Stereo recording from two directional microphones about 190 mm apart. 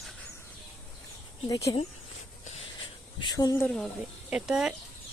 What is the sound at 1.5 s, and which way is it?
Speech, 15° left (ahead or behind).